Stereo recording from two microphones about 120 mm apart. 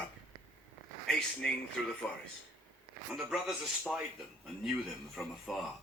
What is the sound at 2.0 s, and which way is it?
Speech, 5° left (ahead or behind).